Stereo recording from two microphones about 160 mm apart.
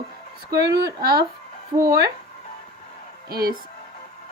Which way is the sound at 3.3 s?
75° right (ahead or behind).